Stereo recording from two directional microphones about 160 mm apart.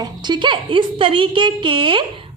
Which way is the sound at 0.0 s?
25° right (ahead or behind).